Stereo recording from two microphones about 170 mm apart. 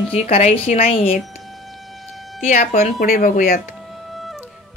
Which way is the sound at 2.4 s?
45° left (ahead or behind).